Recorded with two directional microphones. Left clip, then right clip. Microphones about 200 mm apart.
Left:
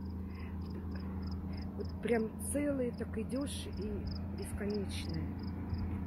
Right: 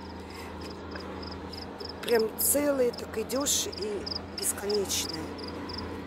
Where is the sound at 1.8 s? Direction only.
5° left (ahead or behind).